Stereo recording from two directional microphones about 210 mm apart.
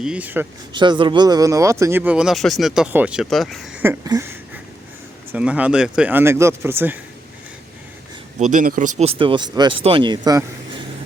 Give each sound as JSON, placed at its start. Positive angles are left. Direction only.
{"t": 0.0, "sound": "speech", "side_deg": -5}
{"t": 0.7, "sound": "speech", "side_deg": -20}
{"t": 8.4, "sound": "speech", "side_deg": -35}